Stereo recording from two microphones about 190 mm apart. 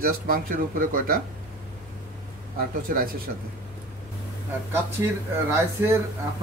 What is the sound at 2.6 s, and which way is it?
Speech, 50° right (ahead or behind).